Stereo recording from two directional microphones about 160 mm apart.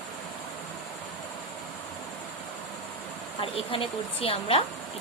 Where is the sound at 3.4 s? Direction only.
35° left (ahead or behind).